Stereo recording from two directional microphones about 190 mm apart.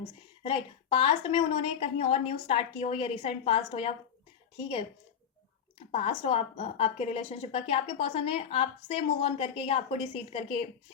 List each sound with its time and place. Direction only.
0.4 s a woman's voice: 30° left (ahead or behind)
5.9 s a woman's voice: 30° left (ahead or behind)